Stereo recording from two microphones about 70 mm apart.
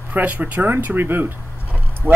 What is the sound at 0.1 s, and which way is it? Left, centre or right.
Speech, right.